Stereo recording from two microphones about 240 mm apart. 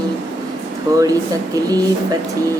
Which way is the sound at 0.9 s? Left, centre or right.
Centre.